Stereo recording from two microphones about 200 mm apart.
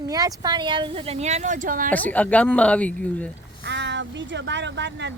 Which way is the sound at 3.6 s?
60° right (ahead or behind).